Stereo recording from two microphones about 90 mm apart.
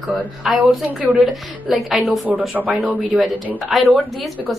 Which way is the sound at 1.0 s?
10° right (ahead or behind).